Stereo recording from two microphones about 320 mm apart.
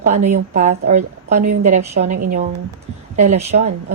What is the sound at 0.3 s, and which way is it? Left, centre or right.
A woman's voice, right.